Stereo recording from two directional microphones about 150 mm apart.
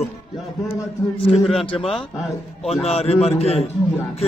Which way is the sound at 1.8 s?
Centre (ahead or behind).